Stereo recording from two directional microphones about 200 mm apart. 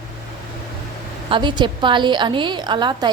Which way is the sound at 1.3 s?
25° right (ahead or behind).